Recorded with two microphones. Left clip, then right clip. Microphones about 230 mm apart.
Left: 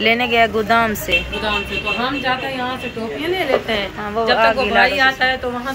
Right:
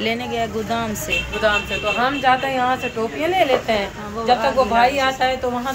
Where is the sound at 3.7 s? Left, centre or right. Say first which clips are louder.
Even; right.